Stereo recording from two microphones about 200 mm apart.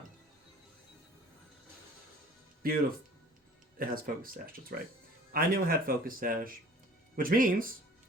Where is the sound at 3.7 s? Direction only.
45° right (ahead or behind).